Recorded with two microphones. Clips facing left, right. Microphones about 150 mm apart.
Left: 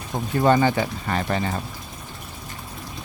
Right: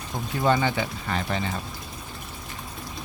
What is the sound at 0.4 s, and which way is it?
Speech, 45° left (ahead or behind).